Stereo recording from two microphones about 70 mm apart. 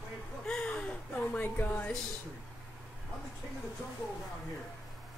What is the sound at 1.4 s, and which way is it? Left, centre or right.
Speech, left.